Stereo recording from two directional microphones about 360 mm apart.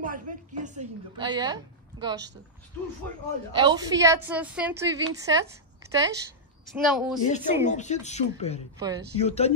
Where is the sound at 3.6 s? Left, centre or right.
Centre.